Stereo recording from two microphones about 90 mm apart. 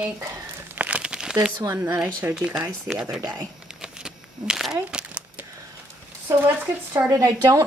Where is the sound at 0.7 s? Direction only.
15° right (ahead or behind).